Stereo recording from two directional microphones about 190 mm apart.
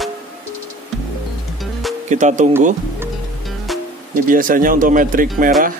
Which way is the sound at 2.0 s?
40° right (ahead or behind).